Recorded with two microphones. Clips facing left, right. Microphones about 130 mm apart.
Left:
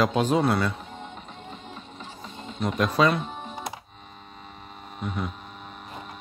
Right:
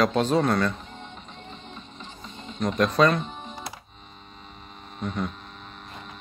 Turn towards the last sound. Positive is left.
turn(degrees=5)  # may be behind; listen again after turning